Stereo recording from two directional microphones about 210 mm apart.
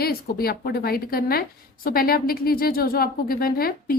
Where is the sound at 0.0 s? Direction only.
45° left (ahead or behind).